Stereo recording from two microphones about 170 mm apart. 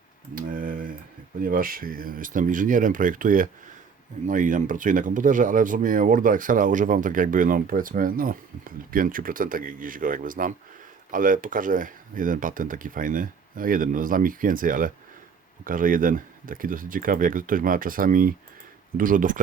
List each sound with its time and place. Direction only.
0.3 s typing: 55° right (ahead or behind)
1.4 s speech: 55° right (ahead or behind)